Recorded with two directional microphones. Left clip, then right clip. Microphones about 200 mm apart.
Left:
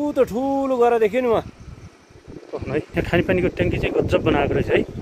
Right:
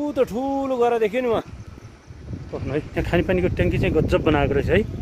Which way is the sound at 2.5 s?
5° left (ahead or behind).